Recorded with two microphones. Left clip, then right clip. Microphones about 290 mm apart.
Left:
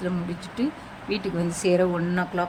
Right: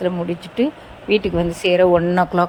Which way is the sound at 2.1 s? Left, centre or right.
Centre.